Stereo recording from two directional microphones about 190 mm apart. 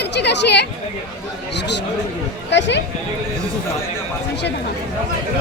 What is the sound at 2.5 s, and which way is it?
Chatter, 70° left (ahead or behind).